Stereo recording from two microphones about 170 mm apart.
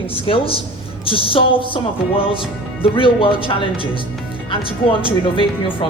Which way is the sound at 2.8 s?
30° left (ahead or behind).